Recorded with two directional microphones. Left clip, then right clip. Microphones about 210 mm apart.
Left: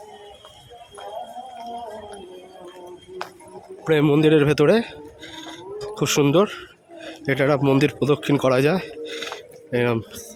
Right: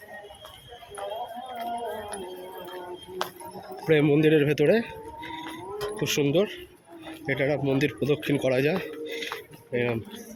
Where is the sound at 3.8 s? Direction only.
25° left (ahead or behind).